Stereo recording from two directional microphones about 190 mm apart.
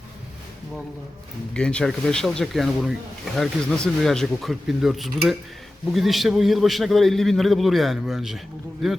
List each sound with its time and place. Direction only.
1.5 s a man's voice: 5° left (ahead or behind)